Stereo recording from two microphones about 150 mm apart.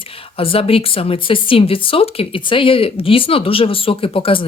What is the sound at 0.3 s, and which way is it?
Speech, 40° left (ahead or behind).